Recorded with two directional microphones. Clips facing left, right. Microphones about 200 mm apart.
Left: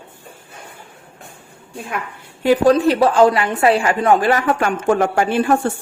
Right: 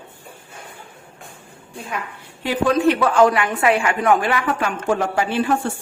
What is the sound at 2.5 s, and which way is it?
A woman's voice, 35° left (ahead or behind).